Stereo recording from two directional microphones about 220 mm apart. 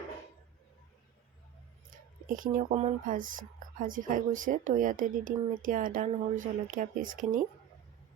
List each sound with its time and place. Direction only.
1.9 s speech: 40° right (ahead or behind)